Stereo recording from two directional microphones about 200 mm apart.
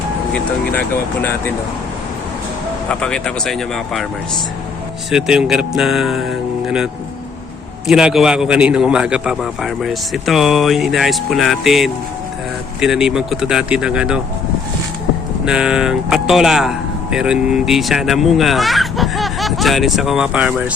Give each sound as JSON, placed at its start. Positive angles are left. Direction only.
{"t": 0.3, "sound": "speech", "side_deg": 10}
{"t": 2.9, "sound": "speech", "side_deg": 5}
{"t": 5.1, "sound": "speech", "side_deg": -5}
{"t": 7.9, "sound": "speech", "side_deg": 0}
{"t": 15.4, "sound": "speech", "side_deg": -5}